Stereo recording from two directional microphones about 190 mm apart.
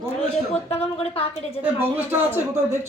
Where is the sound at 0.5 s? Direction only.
30° left (ahead or behind).